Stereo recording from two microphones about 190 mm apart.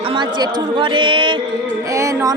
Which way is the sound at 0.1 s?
25° right (ahead or behind).